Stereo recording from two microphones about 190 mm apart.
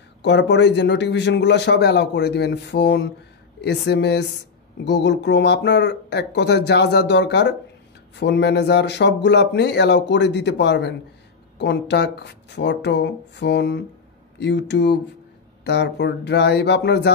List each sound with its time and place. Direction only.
0.2 s a man's voice: 65° left (ahead or behind)